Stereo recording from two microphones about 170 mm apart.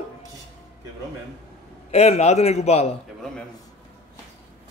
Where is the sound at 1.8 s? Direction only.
40° left (ahead or behind).